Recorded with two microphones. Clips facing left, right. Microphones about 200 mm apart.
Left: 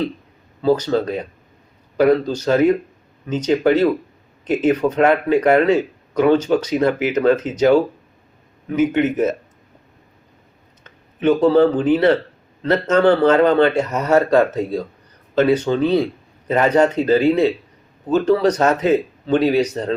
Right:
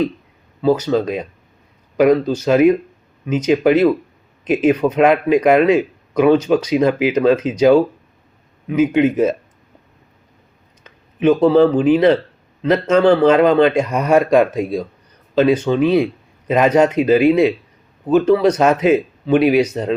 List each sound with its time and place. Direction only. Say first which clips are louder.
0.6 s speech: right 1 dB; 15° right (ahead or behind)
11.3 s speech: right 2 dB; 10° right (ahead or behind)